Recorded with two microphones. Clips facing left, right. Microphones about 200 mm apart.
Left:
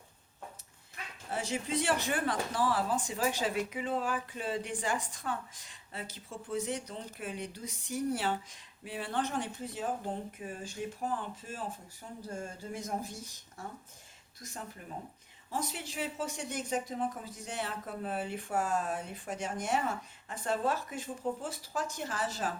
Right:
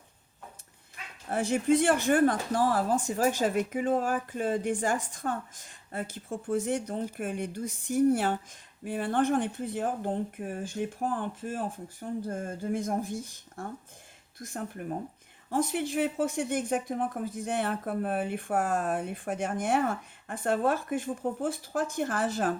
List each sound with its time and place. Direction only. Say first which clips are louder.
1.3 s a woman's voice: right 9 dB; 50° right (ahead or behind)